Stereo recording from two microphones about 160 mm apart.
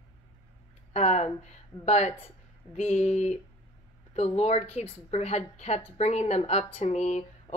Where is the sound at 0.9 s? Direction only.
40° left (ahead or behind).